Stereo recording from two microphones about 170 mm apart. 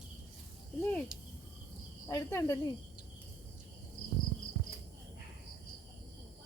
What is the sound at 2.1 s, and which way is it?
Speech, 15° left (ahead or behind).